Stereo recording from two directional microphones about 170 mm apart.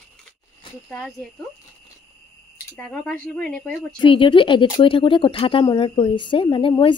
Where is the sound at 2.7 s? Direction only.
5° left (ahead or behind).